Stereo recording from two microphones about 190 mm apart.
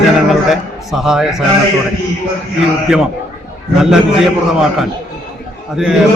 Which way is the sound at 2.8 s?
5° right (ahead or behind).